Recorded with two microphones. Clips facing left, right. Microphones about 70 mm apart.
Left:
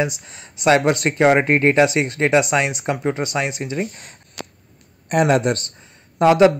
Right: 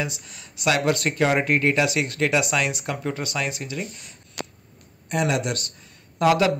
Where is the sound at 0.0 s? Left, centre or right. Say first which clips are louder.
Left 7 dB; left.